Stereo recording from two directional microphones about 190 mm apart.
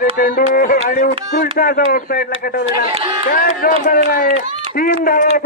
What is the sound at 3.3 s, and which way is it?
Speech, 50° left (ahead or behind).